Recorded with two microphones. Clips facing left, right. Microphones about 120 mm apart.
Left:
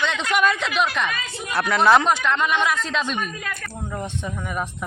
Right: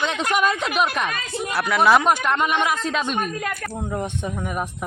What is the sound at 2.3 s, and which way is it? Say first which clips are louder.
Speech: even; 45° right (ahead or behind).